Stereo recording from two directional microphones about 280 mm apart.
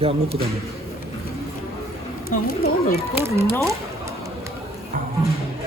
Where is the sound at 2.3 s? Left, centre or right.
Left.